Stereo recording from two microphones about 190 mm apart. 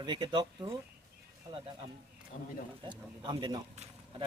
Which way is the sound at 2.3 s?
45° left (ahead or behind).